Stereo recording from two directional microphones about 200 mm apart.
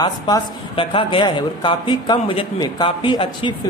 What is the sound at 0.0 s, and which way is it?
A man's voice, 25° left (ahead or behind).